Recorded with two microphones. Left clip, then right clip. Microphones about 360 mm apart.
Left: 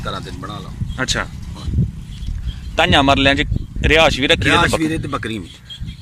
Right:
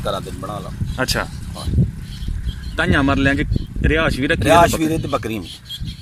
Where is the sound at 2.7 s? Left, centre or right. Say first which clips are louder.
Left 5 dB; centre.